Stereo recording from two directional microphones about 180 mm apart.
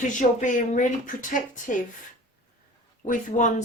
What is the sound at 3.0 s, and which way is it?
Speech, 45° left (ahead or behind).